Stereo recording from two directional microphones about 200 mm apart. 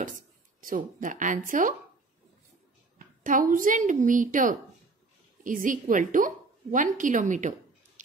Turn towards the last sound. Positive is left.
turn(degrees=-40)  # may be behind; listen again after turning